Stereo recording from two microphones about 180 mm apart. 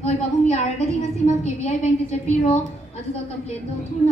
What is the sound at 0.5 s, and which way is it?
A man's voice, 40° left (ahead or behind).